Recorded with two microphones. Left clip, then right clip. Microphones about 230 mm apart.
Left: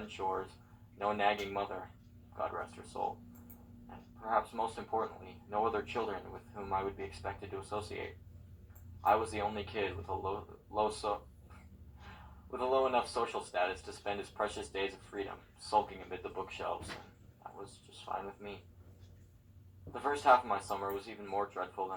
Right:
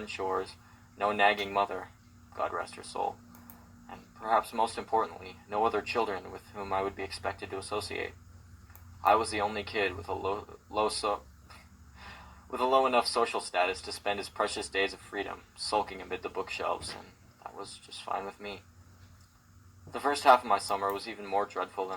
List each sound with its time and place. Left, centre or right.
0.2 s speech: right
3.0 s speech: right
9.0 s speech: right
12.5 s speech: right
18.4 s speech: right
19.9 s speech: right